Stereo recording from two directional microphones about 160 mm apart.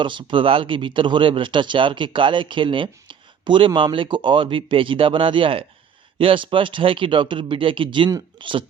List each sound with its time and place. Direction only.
0.0 s speech: 30° right (ahead or behind)